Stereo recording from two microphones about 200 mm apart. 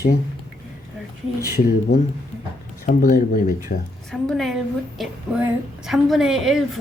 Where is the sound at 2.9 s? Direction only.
40° left (ahead or behind).